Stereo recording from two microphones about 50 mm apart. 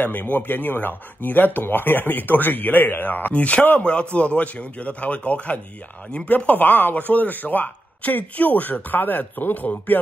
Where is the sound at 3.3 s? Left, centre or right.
Left.